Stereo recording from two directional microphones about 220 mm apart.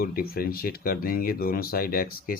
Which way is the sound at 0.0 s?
45° left (ahead or behind).